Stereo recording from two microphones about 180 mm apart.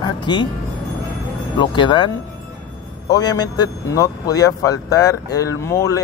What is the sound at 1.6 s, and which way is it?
Speech, 25° left (ahead or behind).